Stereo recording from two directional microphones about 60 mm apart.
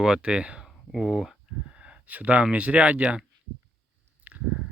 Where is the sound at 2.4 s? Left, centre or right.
Right.